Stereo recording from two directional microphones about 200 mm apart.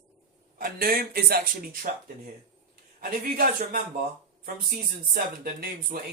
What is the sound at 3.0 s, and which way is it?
Speech, 45° right (ahead or behind).